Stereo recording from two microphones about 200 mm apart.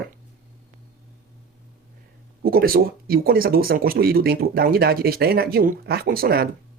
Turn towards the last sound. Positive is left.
turn(degrees=-50)  # may be behind; listen again after turning